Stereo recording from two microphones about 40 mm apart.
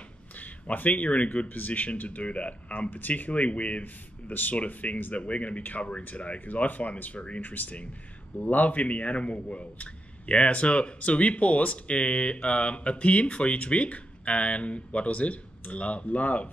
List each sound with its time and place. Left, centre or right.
0.4 s speech: left
1.5 s speech: left
2.0 s a man's voice: left
2.9 s a man's voice: left